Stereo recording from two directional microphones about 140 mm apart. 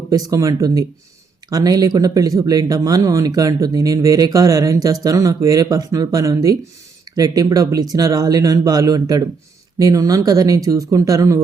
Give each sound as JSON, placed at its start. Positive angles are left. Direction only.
{"t": 0.3, "sound": "speech", "side_deg": -25}